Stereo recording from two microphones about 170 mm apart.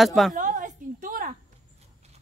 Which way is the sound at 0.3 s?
50° right (ahead or behind).